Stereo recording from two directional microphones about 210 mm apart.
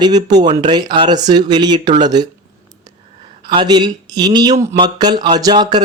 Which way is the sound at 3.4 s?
20° right (ahead or behind).